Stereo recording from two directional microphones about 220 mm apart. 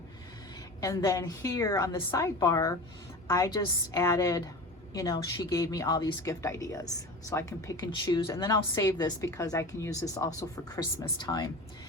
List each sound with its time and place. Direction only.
0.8 s speech: 15° left (ahead or behind)